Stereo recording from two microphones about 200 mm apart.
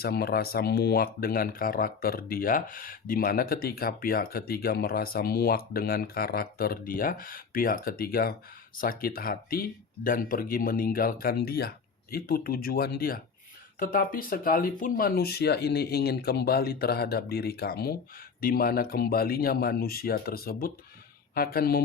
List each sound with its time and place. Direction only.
0.0 s speech: 50° left (ahead or behind)